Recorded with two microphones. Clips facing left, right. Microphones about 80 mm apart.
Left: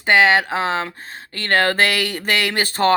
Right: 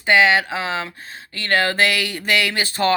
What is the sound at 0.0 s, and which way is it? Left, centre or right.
Speech, left.